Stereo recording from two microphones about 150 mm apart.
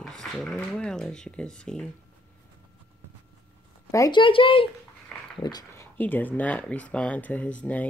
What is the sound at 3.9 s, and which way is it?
Speech, 20° left (ahead or behind).